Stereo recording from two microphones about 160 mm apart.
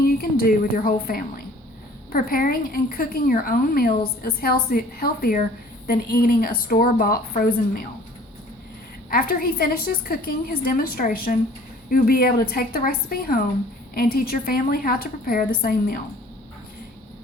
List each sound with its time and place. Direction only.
0.2 s a woman's voice: 70° left (ahead or behind)
9.0 s a woman's voice: 70° left (ahead or behind)